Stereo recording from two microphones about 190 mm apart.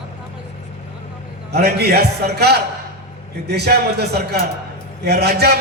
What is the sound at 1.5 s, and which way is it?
A man's voice, 60° right (ahead or behind).